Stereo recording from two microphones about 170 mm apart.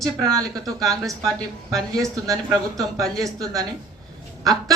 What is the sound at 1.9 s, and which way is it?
Speech, 20° right (ahead or behind).